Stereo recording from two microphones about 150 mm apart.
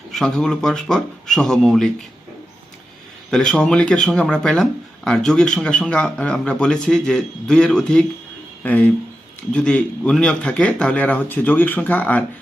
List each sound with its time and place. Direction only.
0.1 s speech: centre (ahead or behind)
3.2 s speech: 5° left (ahead or behind)